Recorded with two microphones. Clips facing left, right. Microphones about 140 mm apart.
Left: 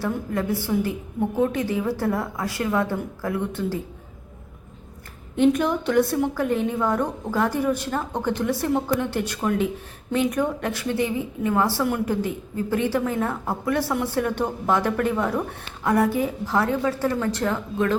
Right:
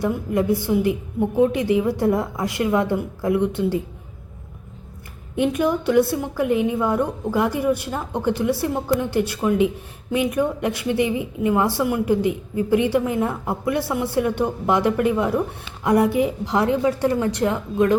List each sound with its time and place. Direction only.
0.0 s a woman's voice: 15° right (ahead or behind)
5.4 s a woman's voice: 5° right (ahead or behind)